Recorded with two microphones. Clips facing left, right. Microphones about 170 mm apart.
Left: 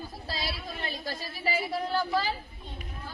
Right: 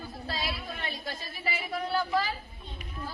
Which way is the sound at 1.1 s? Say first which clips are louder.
Left 6 dB; 35° left (ahead or behind).